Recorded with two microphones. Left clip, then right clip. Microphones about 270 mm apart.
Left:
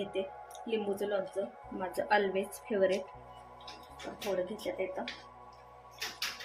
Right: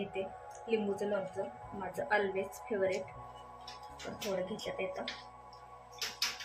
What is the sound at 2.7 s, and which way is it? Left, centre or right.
Speech, left.